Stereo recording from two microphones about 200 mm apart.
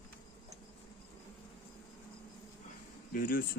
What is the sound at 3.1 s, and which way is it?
Speech, 45° left (ahead or behind).